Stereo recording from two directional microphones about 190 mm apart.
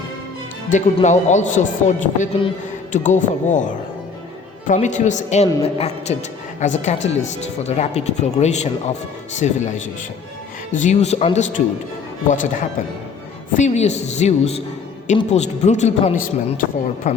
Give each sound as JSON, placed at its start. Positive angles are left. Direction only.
{"t": 0.9, "sound": "speech", "side_deg": 40}